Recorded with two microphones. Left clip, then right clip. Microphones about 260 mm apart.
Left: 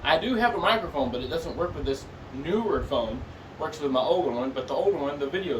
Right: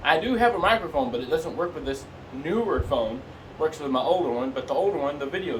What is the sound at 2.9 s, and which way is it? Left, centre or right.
A man's voice, centre.